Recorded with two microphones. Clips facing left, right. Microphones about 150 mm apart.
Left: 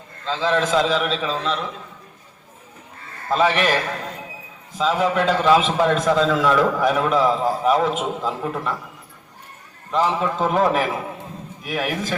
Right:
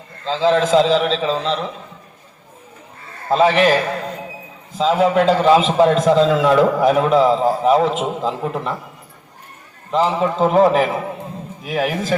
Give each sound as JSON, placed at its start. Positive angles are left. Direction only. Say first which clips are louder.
{"t": 0.3, "sound": "a man's voice", "louder": "right 5 dB", "side_deg": -30}
{"t": 3.2, "sound": "a man's voice", "louder": "right 5 dB", "side_deg": -25}
{"t": 4.8, "sound": "a man's voice", "louder": "right 5 dB", "side_deg": -30}
{"t": 9.9, "sound": "a man's voice", "louder": "right 3 dB", "side_deg": -30}